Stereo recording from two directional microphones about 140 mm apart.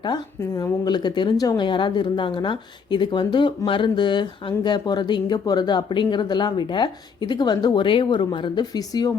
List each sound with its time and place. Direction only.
0.0 s speech: 30° left (ahead or behind)